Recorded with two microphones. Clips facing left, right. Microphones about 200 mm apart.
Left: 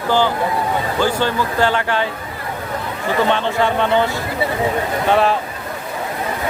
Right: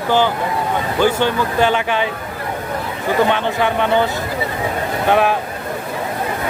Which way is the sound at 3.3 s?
15° right (ahead or behind).